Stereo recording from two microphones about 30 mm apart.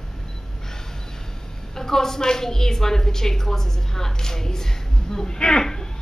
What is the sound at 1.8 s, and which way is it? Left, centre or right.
A woman's voice, centre.